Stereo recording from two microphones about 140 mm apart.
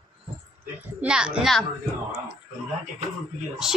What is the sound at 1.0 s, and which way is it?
Speech, 5° right (ahead or behind).